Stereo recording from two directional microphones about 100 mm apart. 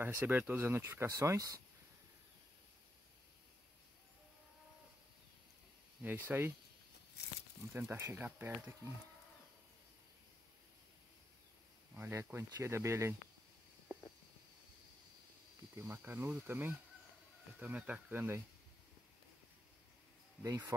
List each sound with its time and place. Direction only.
0.0 s speech: 20° right (ahead or behind)
6.0 s speech: 20° right (ahead or behind)
7.7 s speech: 25° right (ahead or behind)
11.9 s speech: 25° right (ahead or behind)
15.7 s speech: 25° right (ahead or behind)
20.4 s speech: 35° right (ahead or behind)